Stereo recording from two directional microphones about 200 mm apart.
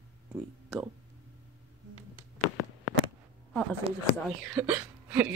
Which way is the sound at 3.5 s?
5° left (ahead or behind).